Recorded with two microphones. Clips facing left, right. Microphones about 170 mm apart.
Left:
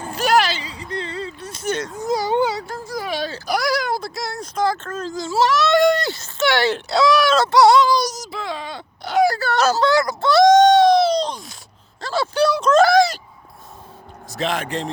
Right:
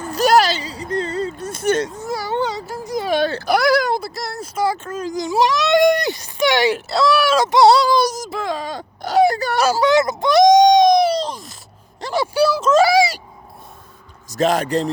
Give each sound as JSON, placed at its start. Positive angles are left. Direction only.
{"t": 0.1, "sound": "a sound", "side_deg": -40}
{"t": 2.0, "sound": "whimper", "side_deg": 20}
{"t": 2.4, "sound": "a sound", "side_deg": 5}
{"t": 2.8, "sound": "a sound", "side_deg": -20}
{"t": 3.1, "sound": "baby cry", "side_deg": -60}
{"t": 4.0, "sound": "speech", "side_deg": 0}
{"t": 6.7, "sound": "speech", "side_deg": 0}
{"t": 7.7, "sound": "speech", "side_deg": -45}
{"t": 9.2, "sound": "speech", "side_deg": -20}
{"t": 9.9, "sound": "speech", "side_deg": -20}
{"t": 11.2, "sound": "speech", "side_deg": 0}
{"t": 12.0, "sound": "speech", "side_deg": -15}
{"t": 14.3, "sound": "a man's voice", "side_deg": -40}